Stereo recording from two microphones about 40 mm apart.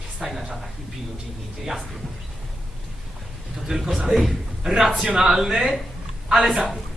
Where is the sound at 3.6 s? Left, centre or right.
Centre.